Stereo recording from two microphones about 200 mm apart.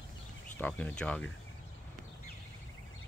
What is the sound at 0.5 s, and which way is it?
Speech, 5° left (ahead or behind).